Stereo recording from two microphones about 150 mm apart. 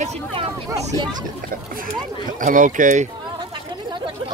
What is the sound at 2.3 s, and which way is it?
Speech, 60° right (ahead or behind).